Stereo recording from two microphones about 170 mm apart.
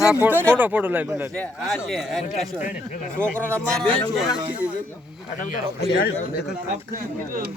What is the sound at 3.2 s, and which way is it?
Speech, 10° left (ahead or behind).